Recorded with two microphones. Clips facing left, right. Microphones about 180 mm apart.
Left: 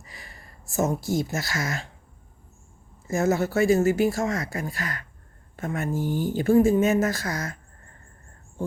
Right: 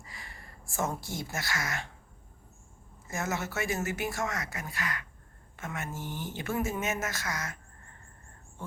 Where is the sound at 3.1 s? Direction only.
30° left (ahead or behind).